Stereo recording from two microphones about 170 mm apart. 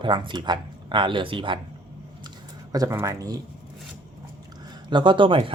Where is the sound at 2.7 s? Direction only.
20° right (ahead or behind).